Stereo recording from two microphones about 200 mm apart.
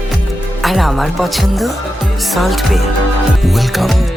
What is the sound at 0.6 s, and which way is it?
Speech, centre (ahead or behind).